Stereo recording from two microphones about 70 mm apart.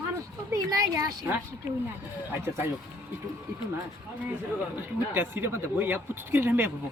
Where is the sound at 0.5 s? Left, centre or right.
Right.